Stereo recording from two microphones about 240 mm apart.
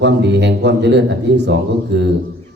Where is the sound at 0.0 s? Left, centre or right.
Right.